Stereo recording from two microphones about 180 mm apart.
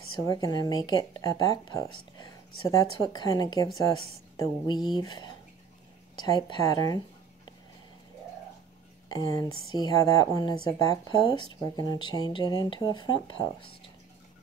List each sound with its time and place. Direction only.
0.3 s speech: 20° left (ahead or behind)
9.4 s speech: 20° left (ahead or behind)